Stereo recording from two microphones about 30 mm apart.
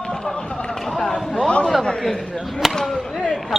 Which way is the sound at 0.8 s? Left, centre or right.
Centre.